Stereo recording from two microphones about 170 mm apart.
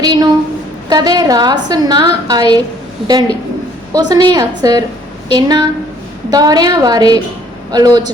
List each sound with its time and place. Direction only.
0.0 s a woman's voice: 25° right (ahead or behind)